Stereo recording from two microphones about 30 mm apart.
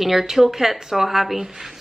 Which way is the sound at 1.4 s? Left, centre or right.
Centre.